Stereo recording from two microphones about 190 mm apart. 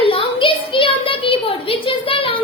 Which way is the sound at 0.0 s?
30° left (ahead or behind).